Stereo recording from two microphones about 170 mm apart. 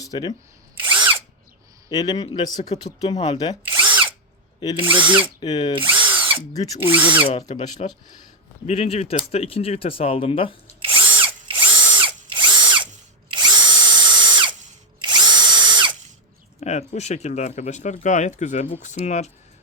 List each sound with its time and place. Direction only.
0.0 s speech: 25° left (ahead or behind)
0.9 s drill: 25° right (ahead or behind)
1.9 s speech: 20° left (ahead or behind)
3.6 s drill: 10° right (ahead or behind)
4.6 s speech: 25° left (ahead or behind)
4.9 s speech: 10° right (ahead or behind)
5.4 s speech: 25° left (ahead or behind)
6.1 s drill: 10° right (ahead or behind)
6.9 s speech: 10° right (ahead or behind)
7.3 s speech: 30° left (ahead or behind)
11.4 s drill: 30° right (ahead or behind)
16.6 s speech: 40° left (ahead or behind)